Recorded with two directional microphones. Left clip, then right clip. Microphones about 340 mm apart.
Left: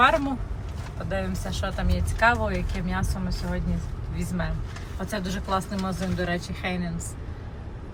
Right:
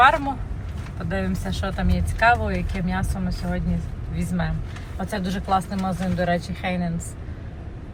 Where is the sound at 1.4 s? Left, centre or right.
Centre.